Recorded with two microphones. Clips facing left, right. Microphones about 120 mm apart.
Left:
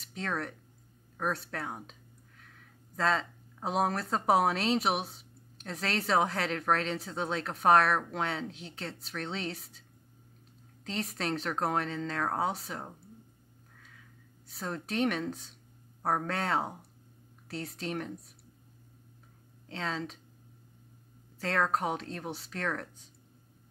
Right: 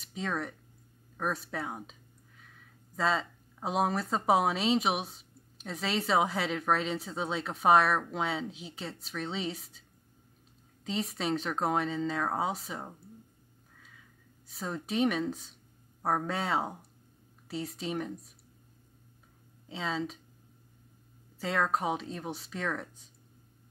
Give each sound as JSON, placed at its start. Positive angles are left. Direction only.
{"t": 0.0, "sound": "speech", "side_deg": 0}
{"t": 1.1, "sound": "a sound", "side_deg": 0}
{"t": 3.0, "sound": "speech", "side_deg": 0}
{"t": 14.5, "sound": "speech", "side_deg": 0}
{"t": 19.7, "sound": "speech", "side_deg": -5}
{"t": 21.4, "sound": "speech", "side_deg": 0}